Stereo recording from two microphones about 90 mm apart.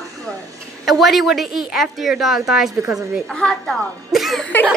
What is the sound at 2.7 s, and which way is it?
Speech, 35° right (ahead or behind).